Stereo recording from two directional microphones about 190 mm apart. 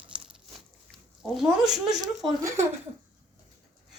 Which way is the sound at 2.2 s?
15° right (ahead or behind).